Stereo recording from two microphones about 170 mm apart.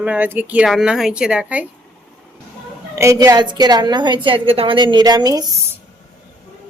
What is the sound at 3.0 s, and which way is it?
A woman's voice, 20° right (ahead or behind).